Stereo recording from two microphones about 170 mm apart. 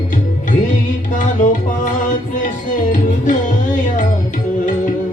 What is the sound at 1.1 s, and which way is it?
Music, 50° left (ahead or behind).